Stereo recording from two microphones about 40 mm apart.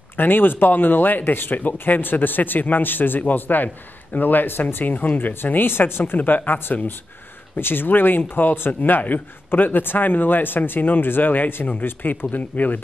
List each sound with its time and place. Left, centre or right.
0.2 s speech: left
3.2 s speech: left
4.9 s speech: left
5.5 s speech: left
6.1 s speech: left
8.9 s speech: left